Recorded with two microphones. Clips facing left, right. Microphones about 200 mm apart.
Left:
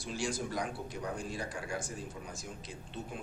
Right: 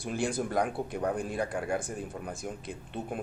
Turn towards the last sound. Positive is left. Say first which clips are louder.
# right 6 dB
turn(degrees=-55)  # may be behind; listen again after turning